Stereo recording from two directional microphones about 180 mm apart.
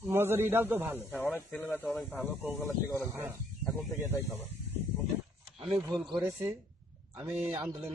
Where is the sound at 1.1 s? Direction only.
10° left (ahead or behind).